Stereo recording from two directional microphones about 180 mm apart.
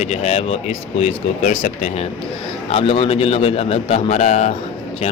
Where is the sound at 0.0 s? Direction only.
40° left (ahead or behind).